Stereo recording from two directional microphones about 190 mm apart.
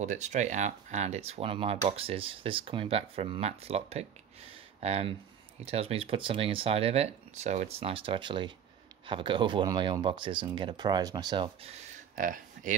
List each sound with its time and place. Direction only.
0.0 s speech: 40° right (ahead or behind)
12.2 s speech: 45° right (ahead or behind)